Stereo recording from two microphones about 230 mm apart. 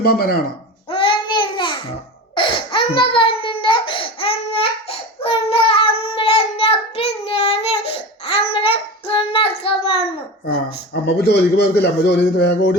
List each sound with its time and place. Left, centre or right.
0.0 s speech: left
0.9 s child singing: left
2.3 s crying: left
8.5 s child singing: left
10.4 s a man's voice: left